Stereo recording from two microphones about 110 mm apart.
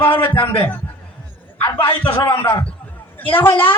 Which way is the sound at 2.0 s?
20° left (ahead or behind).